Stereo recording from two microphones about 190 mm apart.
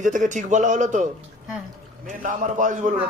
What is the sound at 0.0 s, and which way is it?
A man's voice, 40° right (ahead or behind).